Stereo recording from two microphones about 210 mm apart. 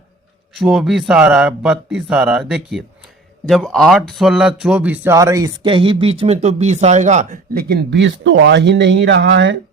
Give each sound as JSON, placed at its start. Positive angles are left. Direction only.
{"t": 0.5, "sound": "speech", "side_deg": 0}